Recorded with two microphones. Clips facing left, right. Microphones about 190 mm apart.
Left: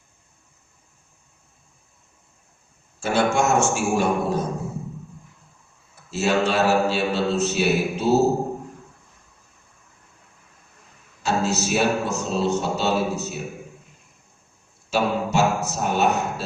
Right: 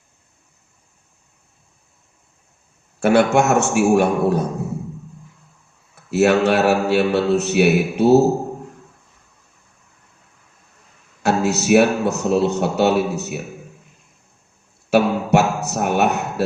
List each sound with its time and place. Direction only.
3.0 s a man's voice: 65° right (ahead or behind)
6.1 s a man's voice: 65° right (ahead or behind)
11.2 s a man's voice: 65° right (ahead or behind)
14.8 s a sound: 65° right (ahead or behind)